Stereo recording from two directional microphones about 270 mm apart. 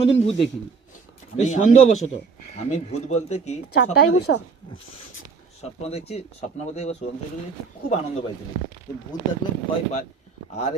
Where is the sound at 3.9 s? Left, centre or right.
Left.